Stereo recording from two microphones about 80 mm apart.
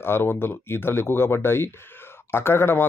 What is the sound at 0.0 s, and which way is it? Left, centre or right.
Speech, left.